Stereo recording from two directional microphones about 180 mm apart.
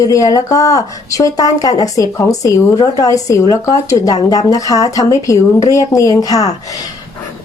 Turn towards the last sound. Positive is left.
turn(degrees=20)  # may be behind; listen again after turning